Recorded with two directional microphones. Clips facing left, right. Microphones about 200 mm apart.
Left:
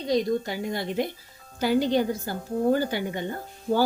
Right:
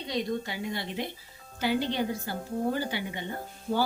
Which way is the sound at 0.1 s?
40° left (ahead or behind).